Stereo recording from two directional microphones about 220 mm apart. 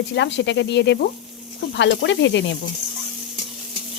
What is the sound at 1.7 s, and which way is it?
Snake, 55° left (ahead or behind).